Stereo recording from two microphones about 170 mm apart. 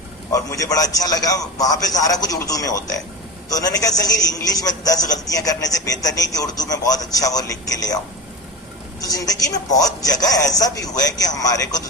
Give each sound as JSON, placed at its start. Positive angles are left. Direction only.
{"t": 0.3, "sound": "a man's voice", "side_deg": 20}
{"t": 9.0, "sound": "a man's voice", "side_deg": 20}